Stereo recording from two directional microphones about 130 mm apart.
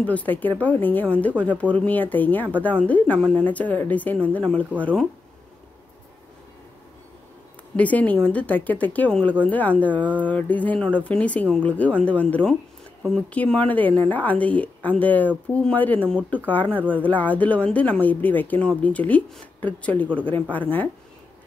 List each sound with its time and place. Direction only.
0.0 s speech: 10° left (ahead or behind)
7.7 s speech: 10° left (ahead or behind)